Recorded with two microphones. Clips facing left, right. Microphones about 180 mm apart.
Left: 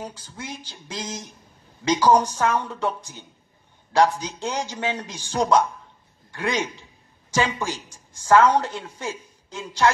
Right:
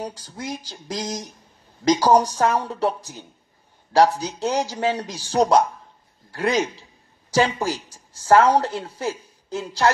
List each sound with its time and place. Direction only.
0.0 s a woman's voice: 40° right (ahead or behind)